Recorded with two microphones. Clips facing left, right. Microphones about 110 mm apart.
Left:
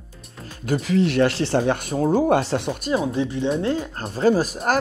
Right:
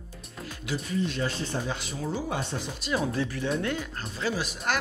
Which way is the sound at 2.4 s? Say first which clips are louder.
Left 10 dB; 75° left (ahead or behind).